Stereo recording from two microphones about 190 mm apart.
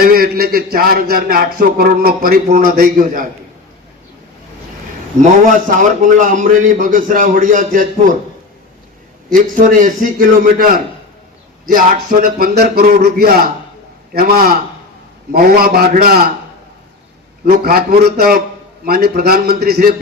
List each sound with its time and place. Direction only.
0.0 s a man's voice: 50° right (ahead or behind)
5.5 s a man's voice: 45° right (ahead or behind)
9.3 s a man's voice: 45° right (ahead or behind)
17.4 s a man's voice: 55° right (ahead or behind)